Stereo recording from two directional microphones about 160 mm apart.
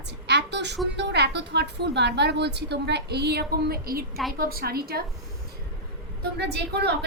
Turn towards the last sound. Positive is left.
turn(degrees=-90)